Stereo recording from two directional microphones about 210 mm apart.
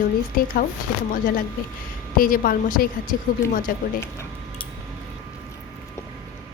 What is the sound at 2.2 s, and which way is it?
A woman's voice, 40° left (ahead or behind).